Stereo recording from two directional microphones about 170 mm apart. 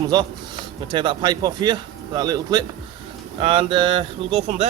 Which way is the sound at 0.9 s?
30° right (ahead or behind).